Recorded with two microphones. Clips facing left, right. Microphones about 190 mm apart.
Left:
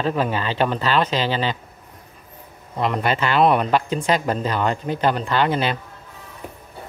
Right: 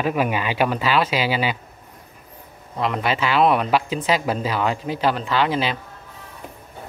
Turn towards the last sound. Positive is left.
turn(degrees=0)  # may be behind; listen again after turning